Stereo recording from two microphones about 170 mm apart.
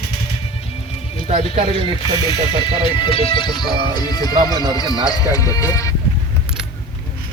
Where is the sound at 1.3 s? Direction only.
40° right (ahead or behind).